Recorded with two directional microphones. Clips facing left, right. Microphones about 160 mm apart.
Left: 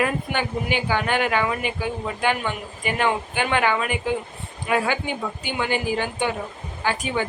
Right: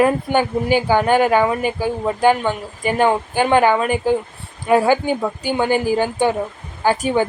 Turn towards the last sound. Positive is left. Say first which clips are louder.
# right 8 dB
turn(degrees=-40)  # may be behind; listen again after turning